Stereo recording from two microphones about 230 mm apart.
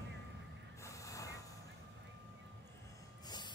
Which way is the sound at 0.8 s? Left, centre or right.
Centre.